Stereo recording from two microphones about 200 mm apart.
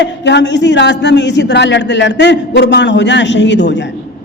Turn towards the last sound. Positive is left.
turn(degrees=60)  # may be behind; listen again after turning